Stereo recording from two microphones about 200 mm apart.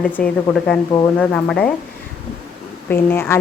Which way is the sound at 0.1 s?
5° left (ahead or behind).